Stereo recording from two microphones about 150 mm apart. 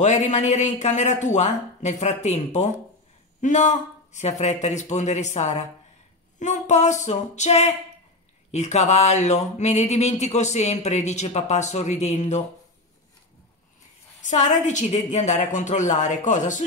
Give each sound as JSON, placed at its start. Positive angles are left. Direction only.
{"t": 0.0, "sound": "speech", "side_deg": 50}
{"t": 14.2, "sound": "a woman's voice", "side_deg": 50}